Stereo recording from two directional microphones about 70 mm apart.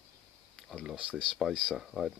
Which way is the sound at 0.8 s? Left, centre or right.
Centre.